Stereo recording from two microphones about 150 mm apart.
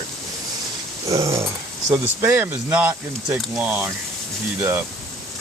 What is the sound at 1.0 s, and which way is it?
Dog, 20° right (ahead or behind).